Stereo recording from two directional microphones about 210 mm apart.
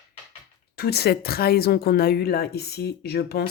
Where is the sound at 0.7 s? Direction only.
50° left (ahead or behind).